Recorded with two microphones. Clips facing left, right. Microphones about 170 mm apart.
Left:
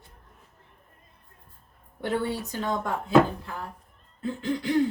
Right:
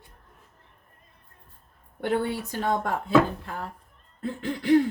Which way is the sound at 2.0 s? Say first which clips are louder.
Right 2 dB; 55° right (ahead or behind).